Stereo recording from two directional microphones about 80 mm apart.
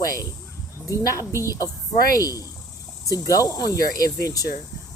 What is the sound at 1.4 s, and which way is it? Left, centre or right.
Speech, left.